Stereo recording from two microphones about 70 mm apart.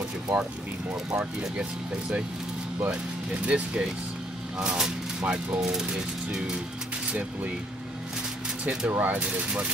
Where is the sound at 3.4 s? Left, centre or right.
Centre.